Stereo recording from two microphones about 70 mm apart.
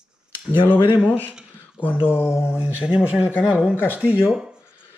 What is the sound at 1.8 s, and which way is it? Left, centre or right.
Speech, left.